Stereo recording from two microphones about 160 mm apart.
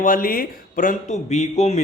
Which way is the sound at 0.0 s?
60° left (ahead or behind).